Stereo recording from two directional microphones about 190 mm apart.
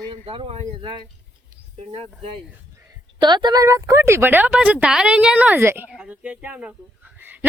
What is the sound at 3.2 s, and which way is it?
A woman's voice, 25° right (ahead or behind).